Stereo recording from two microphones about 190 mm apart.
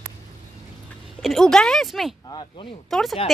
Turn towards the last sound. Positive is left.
turn(degrees=0)  # may be behind; listen again after turning